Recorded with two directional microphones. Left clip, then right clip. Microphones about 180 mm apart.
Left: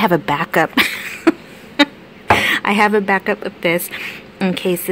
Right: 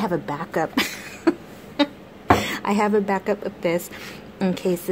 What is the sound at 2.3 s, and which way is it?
Speech, 15° left (ahead or behind).